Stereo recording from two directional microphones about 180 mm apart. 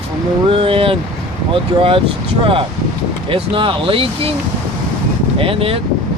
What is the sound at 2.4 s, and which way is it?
Speech, 30° right (ahead or behind).